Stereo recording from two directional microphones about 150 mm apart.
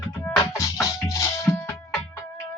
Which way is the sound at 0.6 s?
20° left (ahead or behind).